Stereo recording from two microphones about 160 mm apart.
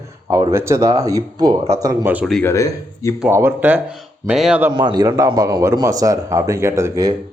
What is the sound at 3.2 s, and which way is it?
Speech, 15° right (ahead or behind).